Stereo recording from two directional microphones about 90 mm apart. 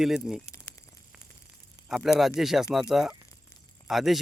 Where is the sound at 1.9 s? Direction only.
5° right (ahead or behind).